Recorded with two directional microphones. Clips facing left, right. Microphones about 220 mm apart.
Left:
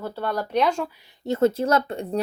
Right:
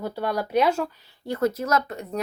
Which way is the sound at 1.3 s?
25° left (ahead or behind).